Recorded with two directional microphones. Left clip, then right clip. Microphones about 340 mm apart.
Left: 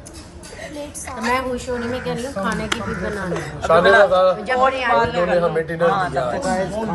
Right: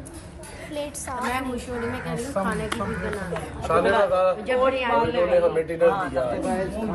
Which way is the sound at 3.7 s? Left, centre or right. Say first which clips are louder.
Left 8 dB; left.